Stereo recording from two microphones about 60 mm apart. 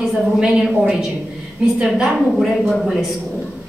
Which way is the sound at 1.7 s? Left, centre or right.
Centre.